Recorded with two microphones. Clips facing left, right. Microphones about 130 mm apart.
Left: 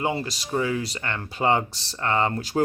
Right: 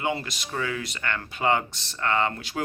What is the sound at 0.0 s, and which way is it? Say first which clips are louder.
Speech: left 2 dB; 30° left (ahead or behind).